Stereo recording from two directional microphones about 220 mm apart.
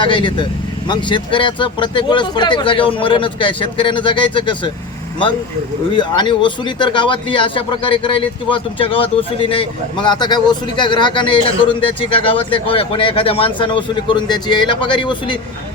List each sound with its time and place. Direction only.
0.0 s speech: 20° left (ahead or behind)
6.0 s speech: 20° left (ahead or behind)